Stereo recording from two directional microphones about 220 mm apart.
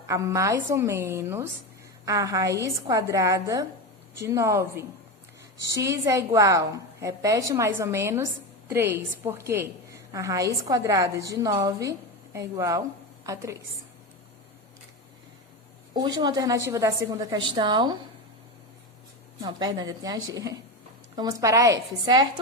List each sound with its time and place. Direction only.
0.1 s a woman's voice: 15° right (ahead or behind)
16.0 s a woman's voice: 20° right (ahead or behind)
19.4 s a woman's voice: 20° right (ahead or behind)